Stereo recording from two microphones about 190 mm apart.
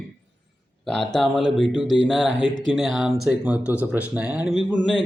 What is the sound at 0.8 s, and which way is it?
Speech, centre (ahead or behind).